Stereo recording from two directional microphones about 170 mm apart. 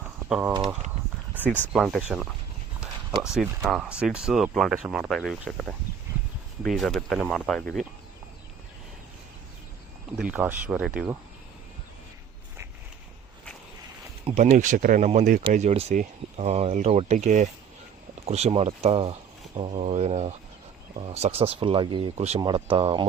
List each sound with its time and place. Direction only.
0.3 s speech: 10° right (ahead or behind)
1.4 s speech: 10° left (ahead or behind)
1.7 s speech: 5° right (ahead or behind)
3.7 s speech: 5° right (ahead or behind)
10.2 s speech: 10° right (ahead or behind)
14.3 s speech: 50° right (ahead or behind); by 23.0 s 30° right (ahead or behind)